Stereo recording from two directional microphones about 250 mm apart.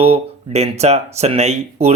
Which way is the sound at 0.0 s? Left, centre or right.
Right.